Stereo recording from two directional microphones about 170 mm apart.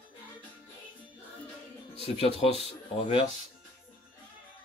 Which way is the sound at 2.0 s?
35° left (ahead or behind).